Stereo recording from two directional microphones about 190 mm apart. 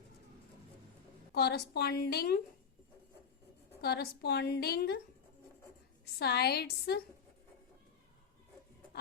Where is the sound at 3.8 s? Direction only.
55° left (ahead or behind).